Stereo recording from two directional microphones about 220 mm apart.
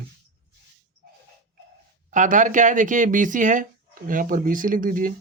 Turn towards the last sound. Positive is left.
turn(degrees=-40)  # may be behind; listen again after turning